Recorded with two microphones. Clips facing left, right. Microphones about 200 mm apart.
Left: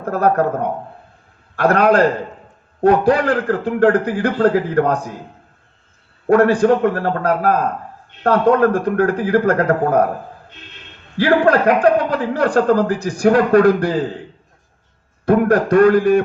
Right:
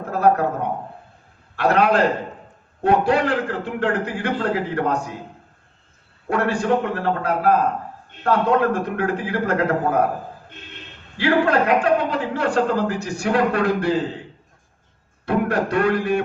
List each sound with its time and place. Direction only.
0.0 s a man's voice: 45° left (ahead or behind)
1.5 s a man's voice: 45° left (ahead or behind)
6.2 s a man's voice: 45° left (ahead or behind)
11.2 s a man's voice: 45° left (ahead or behind)
15.3 s a man's voice: 45° left (ahead or behind)